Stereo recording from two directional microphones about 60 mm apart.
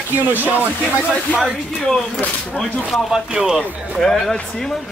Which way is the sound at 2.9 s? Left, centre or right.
Centre.